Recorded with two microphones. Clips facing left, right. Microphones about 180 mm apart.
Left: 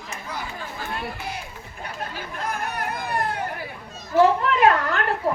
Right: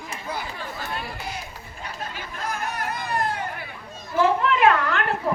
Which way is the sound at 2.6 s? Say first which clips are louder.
Left 1 dB; 60° left (ahead or behind).